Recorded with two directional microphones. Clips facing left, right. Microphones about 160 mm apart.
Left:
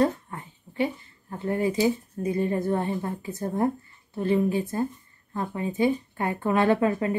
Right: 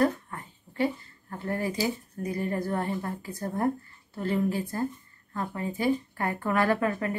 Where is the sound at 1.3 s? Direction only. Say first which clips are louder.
Left 5 dB; 20° left (ahead or behind).